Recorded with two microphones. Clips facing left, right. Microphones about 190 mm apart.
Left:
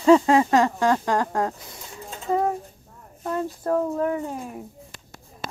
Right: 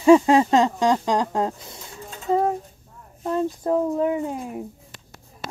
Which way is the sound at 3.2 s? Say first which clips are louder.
Right 3 dB; 15° right (ahead or behind).